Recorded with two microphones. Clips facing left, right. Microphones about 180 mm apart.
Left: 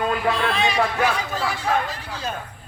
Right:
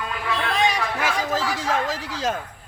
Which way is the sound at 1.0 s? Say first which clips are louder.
Left 1 dB; 90° right.